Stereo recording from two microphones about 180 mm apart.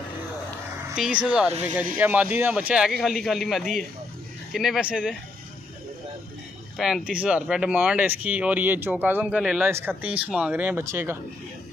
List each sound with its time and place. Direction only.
0.9 s speech: 5° right (ahead or behind)
1.5 s speech: 40° right (ahead or behind)
2.0 s speech: 10° right (ahead or behind)
6.8 s speech: 5° right (ahead or behind)